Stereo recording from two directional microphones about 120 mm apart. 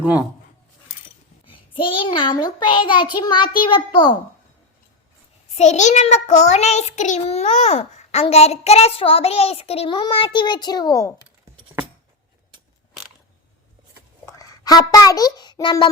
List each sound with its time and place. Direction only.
1.5 s child singing: 45° left (ahead or behind)
5.5 s a child's voice: 75° left (ahead or behind); by 10.0 s 55° left (ahead or behind)
10.0 s child singing: 45° left (ahead or behind)
14.3 s a child's voice: 30° left (ahead or behind)